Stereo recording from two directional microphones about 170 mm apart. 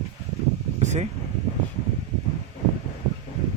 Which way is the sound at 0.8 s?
45° right (ahead or behind).